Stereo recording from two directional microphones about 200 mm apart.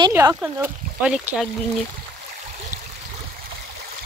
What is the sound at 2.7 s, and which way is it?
Stream, 40° right (ahead or behind).